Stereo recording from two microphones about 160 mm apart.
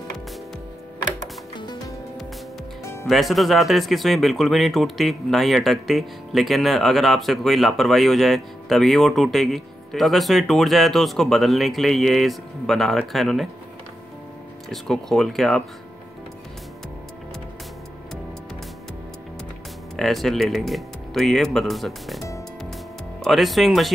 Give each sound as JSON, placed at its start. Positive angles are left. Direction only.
{"t": 1.6, "sound": "music", "side_deg": 25}
{"t": 3.1, "sound": "speech", "side_deg": 0}
{"t": 14.7, "sound": "speech", "side_deg": 0}
{"t": 20.0, "sound": "speech", "side_deg": 0}
{"t": 23.2, "sound": "speech", "side_deg": 0}